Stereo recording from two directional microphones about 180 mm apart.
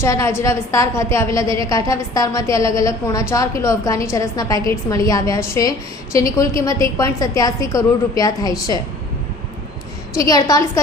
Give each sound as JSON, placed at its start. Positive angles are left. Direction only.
{"t": 0.0, "sound": "a woman's voice", "side_deg": 15}
{"t": 10.2, "sound": "a woman's voice", "side_deg": 20}